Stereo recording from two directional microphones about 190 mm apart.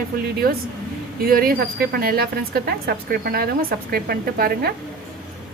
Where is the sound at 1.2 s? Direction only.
50° right (ahead or behind).